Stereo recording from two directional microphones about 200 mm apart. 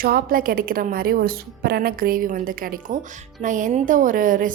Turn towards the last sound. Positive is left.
turn(degrees=-40)  # may be behind; listen again after turning